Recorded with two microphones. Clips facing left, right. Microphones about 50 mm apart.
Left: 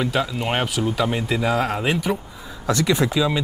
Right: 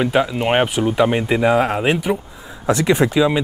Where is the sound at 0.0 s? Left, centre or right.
Right.